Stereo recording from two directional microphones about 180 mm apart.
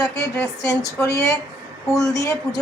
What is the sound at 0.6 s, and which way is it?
Speech, 20° left (ahead or behind).